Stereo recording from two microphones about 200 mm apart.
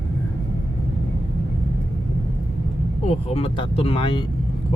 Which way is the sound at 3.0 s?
30° left (ahead or behind).